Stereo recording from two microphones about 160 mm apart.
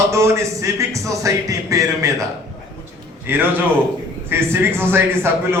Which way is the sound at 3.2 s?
10° right (ahead or behind).